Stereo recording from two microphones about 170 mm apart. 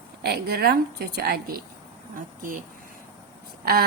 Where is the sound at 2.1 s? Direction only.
55° right (ahead or behind).